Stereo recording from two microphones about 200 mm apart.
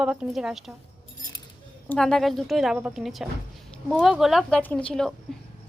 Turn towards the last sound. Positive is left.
turn(degrees=5)  # may be behind; listen again after turning